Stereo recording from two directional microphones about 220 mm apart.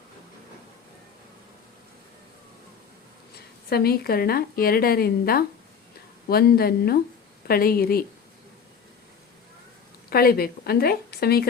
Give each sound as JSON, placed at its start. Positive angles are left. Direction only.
{"t": 3.7, "sound": "a woman's voice", "side_deg": 45}
{"t": 10.1, "sound": "a woman's voice", "side_deg": 45}